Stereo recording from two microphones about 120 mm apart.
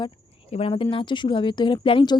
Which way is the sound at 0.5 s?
50° left (ahead or behind).